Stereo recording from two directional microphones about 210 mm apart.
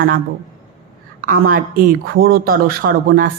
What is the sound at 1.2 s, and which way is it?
A woman's voice, 40° right (ahead or behind).